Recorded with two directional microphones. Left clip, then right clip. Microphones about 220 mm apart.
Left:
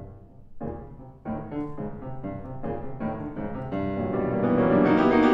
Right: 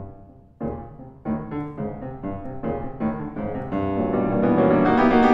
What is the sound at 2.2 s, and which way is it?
Music, 30° right (ahead or behind).